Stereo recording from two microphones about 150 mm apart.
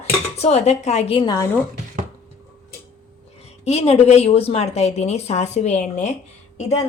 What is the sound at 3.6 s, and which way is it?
Speech, 45° left (ahead or behind).